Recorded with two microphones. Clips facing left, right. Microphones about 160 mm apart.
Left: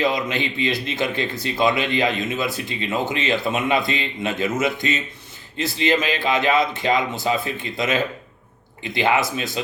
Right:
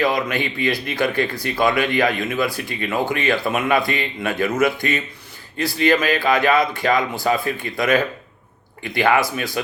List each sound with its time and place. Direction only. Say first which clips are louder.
0.0 s speech: right 2 dB; 20° left (ahead or behind)